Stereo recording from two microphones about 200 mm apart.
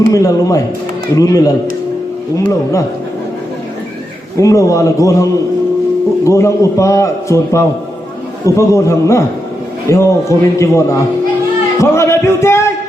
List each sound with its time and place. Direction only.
0.1 s a man's voice: 15° left (ahead or behind)
4.4 s a man's voice: 15° left (ahead or behind)